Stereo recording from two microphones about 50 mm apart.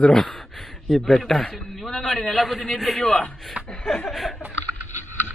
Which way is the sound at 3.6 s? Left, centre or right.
Right.